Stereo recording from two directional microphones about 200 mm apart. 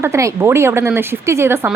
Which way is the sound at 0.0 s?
15° right (ahead or behind).